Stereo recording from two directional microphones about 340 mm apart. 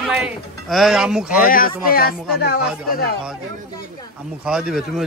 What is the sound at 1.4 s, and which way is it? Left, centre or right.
Speech, left.